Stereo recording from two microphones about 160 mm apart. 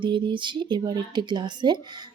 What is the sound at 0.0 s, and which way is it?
Speech, 30° right (ahead or behind).